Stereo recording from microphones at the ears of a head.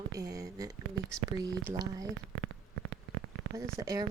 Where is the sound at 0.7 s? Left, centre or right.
Right.